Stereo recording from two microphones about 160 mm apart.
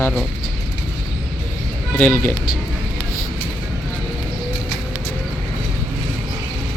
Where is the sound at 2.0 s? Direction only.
10° left (ahead or behind).